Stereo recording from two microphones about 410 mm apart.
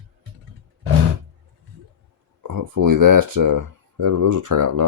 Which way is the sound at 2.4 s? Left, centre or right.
Right.